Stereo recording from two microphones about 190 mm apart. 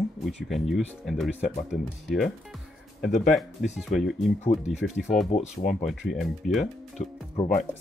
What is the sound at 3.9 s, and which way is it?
Speech, centre (ahead or behind).